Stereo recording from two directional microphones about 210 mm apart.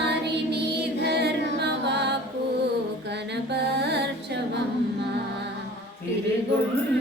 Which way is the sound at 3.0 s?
55° right (ahead or behind).